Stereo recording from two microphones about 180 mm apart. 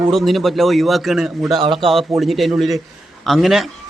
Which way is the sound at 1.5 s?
30° right (ahead or behind).